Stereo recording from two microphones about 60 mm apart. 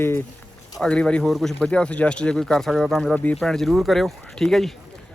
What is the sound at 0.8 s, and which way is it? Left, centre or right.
Speech, centre.